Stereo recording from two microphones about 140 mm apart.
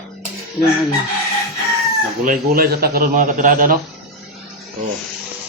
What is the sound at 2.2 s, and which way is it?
A man's voice, 90° right.